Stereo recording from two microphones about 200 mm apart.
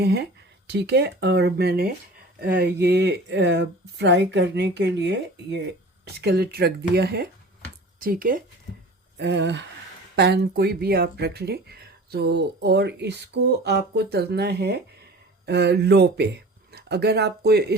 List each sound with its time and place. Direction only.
0.0 s speech: 55° right (ahead or behind)
9.1 s speech: 60° right (ahead or behind)